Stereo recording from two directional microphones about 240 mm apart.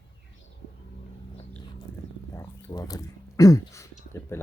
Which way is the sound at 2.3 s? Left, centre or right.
Centre.